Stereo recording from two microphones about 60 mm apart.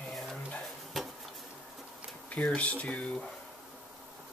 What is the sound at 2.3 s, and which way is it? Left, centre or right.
Speech, left.